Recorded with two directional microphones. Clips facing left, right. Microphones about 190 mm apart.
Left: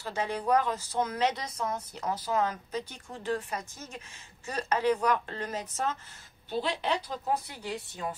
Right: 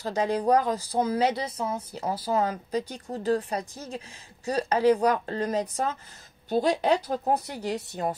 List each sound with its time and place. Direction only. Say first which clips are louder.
0.0 s speech: right 7 dB; 35° right (ahead or behind)